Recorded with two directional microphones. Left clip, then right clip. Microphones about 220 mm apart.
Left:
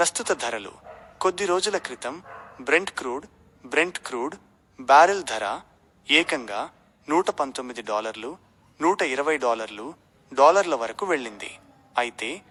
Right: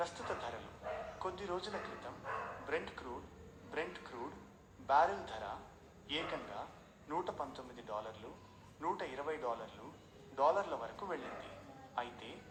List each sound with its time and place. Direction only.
0.0 s speech: 55° left (ahead or behind)